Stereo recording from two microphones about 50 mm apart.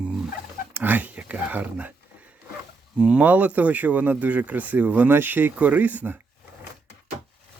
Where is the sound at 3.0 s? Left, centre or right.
Right.